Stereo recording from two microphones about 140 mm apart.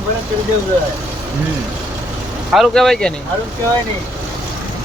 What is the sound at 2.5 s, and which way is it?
Speech, centre (ahead or behind).